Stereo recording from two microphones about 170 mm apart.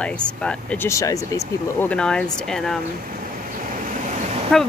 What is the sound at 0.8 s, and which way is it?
Speech, 20° left (ahead or behind).